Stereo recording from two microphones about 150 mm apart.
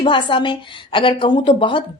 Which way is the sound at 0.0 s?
35° left (ahead or behind).